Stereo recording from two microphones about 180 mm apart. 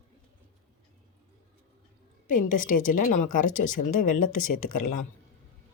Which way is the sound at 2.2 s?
45° left (ahead or behind).